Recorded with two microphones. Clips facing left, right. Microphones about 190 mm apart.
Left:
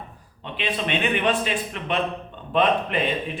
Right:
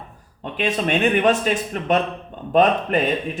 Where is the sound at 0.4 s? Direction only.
45° right (ahead or behind).